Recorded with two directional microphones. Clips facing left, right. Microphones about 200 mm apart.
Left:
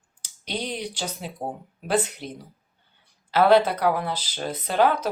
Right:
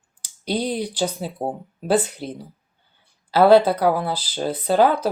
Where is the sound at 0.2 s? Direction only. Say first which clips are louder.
Right 7 dB; 35° right (ahead or behind).